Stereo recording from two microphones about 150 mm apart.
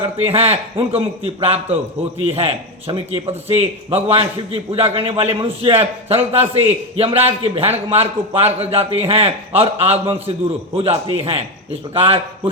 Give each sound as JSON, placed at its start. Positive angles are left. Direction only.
{"t": 0.3, "sound": "a man's voice", "side_deg": -40}